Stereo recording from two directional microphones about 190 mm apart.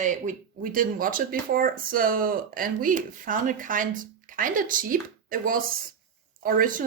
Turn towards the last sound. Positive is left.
turn(degrees=-45)  # may be behind; listen again after turning